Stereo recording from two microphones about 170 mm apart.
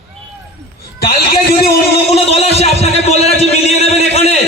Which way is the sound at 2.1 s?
35° left (ahead or behind).